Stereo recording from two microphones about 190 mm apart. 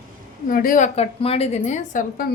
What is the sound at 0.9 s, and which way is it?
Speech, 30° left (ahead or behind).